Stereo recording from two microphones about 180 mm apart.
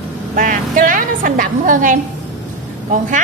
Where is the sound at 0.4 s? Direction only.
50° right (ahead or behind).